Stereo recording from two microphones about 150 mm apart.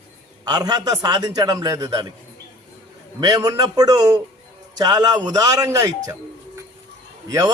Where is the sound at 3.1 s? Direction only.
25° right (ahead or behind).